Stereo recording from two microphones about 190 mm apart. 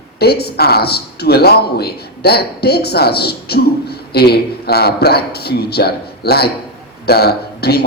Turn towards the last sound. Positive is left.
turn(degrees=55)  # may be behind; listen again after turning